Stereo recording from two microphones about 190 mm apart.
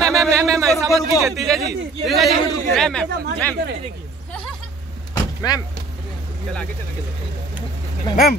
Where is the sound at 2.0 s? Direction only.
Centre (ahead or behind).